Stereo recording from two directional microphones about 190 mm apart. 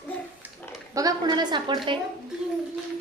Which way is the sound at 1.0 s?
20° right (ahead or behind).